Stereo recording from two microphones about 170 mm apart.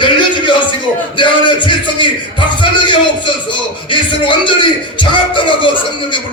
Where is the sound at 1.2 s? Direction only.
30° left (ahead or behind).